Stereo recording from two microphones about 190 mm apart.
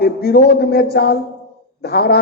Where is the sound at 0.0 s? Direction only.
55° left (ahead or behind).